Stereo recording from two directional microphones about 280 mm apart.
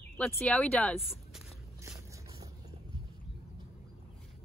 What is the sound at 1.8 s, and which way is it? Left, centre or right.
Vehicle, centre.